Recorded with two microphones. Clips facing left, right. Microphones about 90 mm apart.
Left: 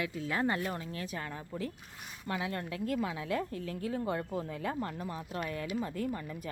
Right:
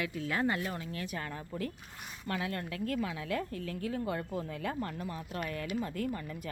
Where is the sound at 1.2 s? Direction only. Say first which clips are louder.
Even; 10° left (ahead or behind).